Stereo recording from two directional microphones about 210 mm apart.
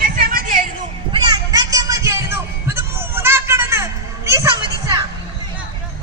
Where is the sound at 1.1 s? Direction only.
20° right (ahead or behind).